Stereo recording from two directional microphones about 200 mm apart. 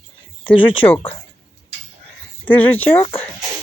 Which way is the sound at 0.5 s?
25° left (ahead or behind).